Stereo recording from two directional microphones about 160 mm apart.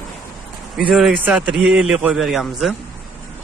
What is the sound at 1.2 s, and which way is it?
A man's voice, 5° right (ahead or behind).